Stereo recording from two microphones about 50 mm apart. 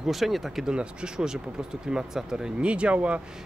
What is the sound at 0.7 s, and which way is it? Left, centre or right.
Speech, centre.